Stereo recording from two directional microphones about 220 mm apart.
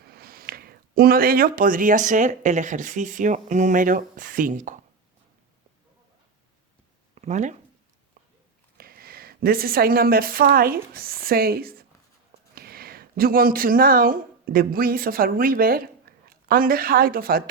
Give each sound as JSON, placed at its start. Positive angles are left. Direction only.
{"t": 0.1, "sound": "speech", "side_deg": -45}
{"t": 7.2, "sound": "speech", "side_deg": -35}
{"t": 8.8, "sound": "a woman's voice", "side_deg": -45}